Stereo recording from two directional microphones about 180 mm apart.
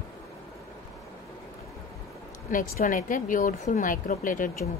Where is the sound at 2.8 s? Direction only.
50° left (ahead or behind).